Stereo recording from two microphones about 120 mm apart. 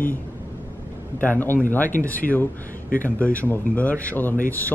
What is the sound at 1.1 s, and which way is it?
A man's voice, 15° left (ahead or behind).